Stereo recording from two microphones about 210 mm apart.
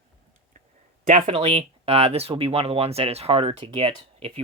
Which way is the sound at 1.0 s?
30° right (ahead or behind).